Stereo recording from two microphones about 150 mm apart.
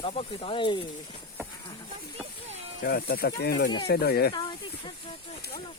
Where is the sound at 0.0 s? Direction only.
40° left (ahead or behind).